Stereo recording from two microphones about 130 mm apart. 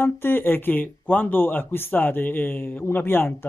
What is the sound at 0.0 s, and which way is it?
Speech, 15° left (ahead or behind).